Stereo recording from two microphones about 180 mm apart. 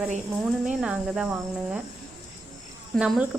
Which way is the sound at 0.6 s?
5° right (ahead or behind).